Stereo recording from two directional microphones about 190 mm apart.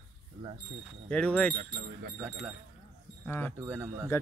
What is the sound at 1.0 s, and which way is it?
Speech, 5° left (ahead or behind).